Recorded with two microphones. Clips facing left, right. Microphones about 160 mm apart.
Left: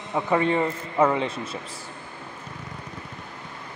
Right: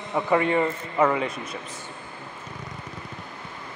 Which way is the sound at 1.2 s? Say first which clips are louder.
Left 1 dB; 30° left (ahead or behind).